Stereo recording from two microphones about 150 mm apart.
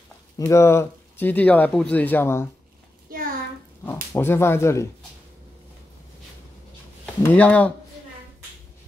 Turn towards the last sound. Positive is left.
turn(degrees=10)  # may be behind; listen again after turning